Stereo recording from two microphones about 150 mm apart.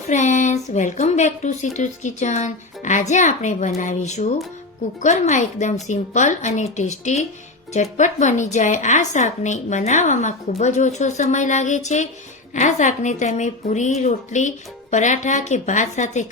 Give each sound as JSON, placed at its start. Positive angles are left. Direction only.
{"t": 0.1, "sound": "speech", "side_deg": 55}